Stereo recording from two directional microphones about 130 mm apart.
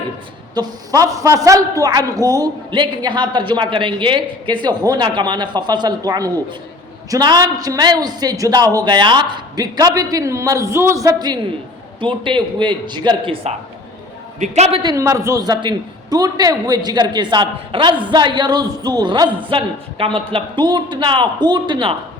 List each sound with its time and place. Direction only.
0.5 s a man's voice: 30° right (ahead or behind); by 13.6 s 50° right (ahead or behind)
14.3 s a man's voice: 60° right (ahead or behind)
14.8 s a man's voice: 30° right (ahead or behind)
19.5 s a man's voice: 45° right (ahead or behind)